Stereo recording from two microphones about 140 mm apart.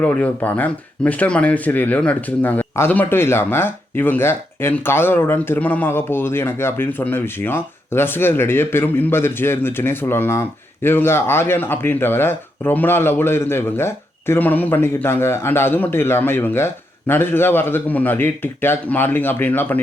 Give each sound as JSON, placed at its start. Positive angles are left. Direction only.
{"t": 0.0, "sound": "speech", "side_deg": 10}